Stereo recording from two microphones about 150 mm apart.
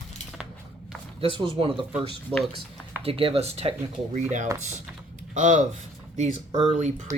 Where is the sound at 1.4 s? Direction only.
35° right (ahead or behind).